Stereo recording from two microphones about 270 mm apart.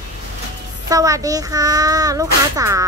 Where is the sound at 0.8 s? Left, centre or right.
Centre.